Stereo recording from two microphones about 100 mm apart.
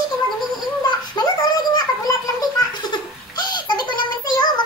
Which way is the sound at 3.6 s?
50° left (ahead or behind).